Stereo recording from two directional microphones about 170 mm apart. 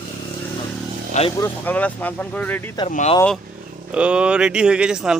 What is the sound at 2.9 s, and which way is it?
Speech, 40° left (ahead or behind).